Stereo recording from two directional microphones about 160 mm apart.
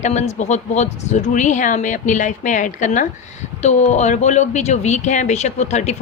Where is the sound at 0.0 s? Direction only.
45° left (ahead or behind).